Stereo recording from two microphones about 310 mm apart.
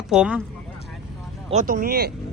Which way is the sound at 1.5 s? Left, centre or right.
Right.